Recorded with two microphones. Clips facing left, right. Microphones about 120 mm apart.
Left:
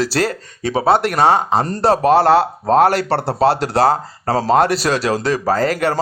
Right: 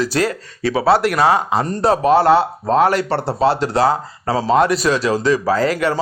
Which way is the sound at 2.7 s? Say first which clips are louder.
Left 2 dB; 70° left (ahead or behind).